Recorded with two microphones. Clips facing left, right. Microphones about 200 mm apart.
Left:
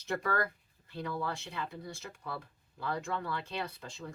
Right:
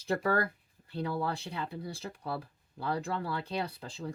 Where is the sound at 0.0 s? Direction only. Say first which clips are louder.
Right 4 dB; 30° right (ahead or behind).